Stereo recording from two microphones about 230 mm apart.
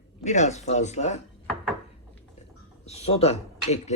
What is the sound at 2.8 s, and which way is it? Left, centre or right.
Speech, left.